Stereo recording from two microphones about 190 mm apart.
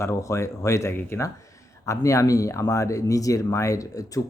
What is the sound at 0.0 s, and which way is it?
Speech, 15° left (ahead or behind).